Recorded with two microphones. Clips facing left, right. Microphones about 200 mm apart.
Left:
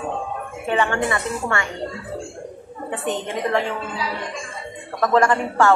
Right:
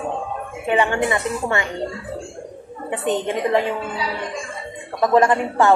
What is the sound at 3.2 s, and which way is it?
Speech, 15° right (ahead or behind).